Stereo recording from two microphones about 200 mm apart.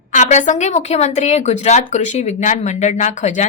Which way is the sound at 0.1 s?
35° left (ahead or behind).